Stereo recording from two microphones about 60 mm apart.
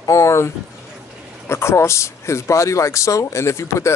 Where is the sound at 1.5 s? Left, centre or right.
Left.